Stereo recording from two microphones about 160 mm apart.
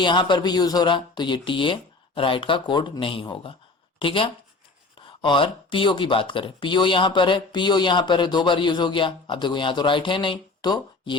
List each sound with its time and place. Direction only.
0.0 s speech: 30° left (ahead or behind)